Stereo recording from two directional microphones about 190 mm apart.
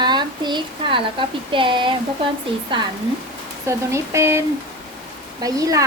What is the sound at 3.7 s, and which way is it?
Speech, 15° right (ahead or behind).